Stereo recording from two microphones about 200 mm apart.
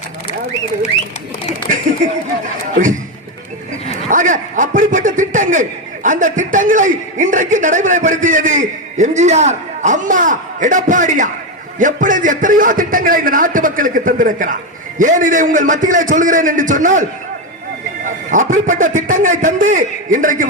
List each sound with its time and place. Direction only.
4.1 s a man's voice: 40° right (ahead or behind)